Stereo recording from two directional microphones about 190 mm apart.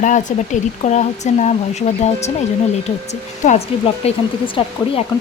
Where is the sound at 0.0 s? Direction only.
40° left (ahead or behind).